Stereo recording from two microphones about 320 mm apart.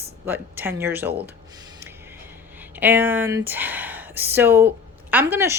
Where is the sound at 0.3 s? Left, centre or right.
Centre.